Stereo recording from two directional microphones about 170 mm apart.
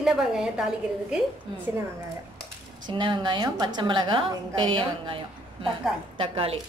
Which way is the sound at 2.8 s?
30° right (ahead or behind).